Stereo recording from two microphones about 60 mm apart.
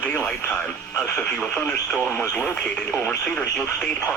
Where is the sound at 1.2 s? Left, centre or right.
Centre.